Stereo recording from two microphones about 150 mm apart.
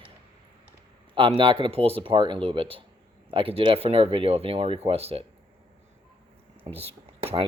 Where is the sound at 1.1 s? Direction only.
35° right (ahead or behind).